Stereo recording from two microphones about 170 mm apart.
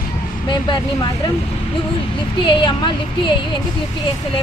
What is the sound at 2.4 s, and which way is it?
Speech, 30° left (ahead or behind).